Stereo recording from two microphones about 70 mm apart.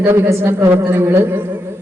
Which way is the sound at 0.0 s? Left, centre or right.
Right.